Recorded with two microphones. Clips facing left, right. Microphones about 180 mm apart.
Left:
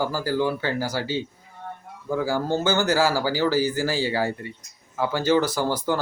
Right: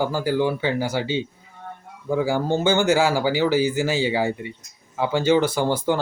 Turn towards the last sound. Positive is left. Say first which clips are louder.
# right 3 dB
turn(degrees=-20)  # may be behind; listen again after turning